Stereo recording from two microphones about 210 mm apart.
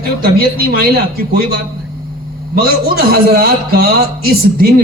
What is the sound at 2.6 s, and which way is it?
A man's voice, 45° right (ahead or behind).